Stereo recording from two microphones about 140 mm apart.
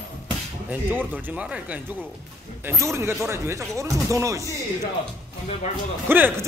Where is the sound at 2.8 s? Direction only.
20° right (ahead or behind).